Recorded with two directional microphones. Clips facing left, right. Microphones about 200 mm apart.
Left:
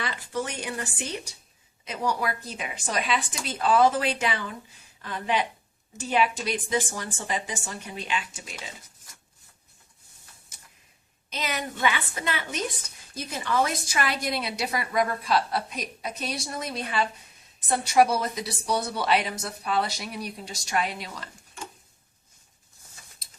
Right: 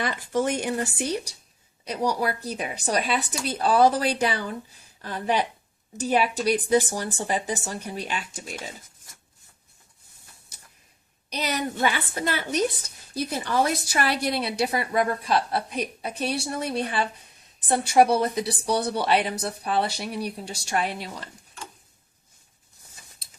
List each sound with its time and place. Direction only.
0.0 s a woman's voice: 50° right (ahead or behind)
11.3 s a woman's voice: 40° right (ahead or behind)